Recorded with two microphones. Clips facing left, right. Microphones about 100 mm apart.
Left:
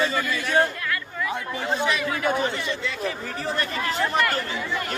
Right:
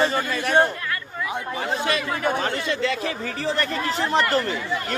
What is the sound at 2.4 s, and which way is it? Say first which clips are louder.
Speech: right 3 dB; 90° right.